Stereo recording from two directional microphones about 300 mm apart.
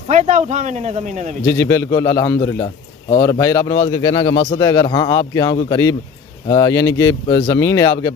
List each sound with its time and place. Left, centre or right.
0.1 s speech: right
1.4 s speech: centre